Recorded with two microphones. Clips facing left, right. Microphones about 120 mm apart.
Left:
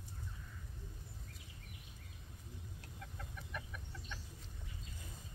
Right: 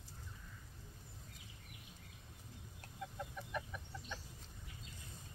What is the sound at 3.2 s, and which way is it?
Chicken, 15° right (ahead or behind).